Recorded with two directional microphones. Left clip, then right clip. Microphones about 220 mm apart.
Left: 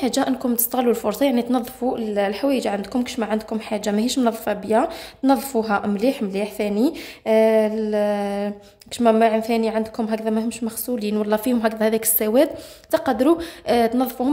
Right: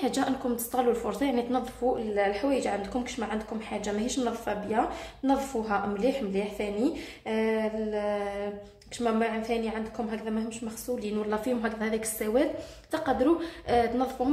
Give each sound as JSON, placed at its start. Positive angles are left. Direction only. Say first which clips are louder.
{"t": 0.0, "sound": "a woman's voice", "louder": "left 7 dB", "side_deg": 35}